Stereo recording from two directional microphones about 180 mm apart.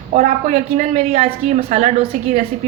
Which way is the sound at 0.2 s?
40° right (ahead or behind).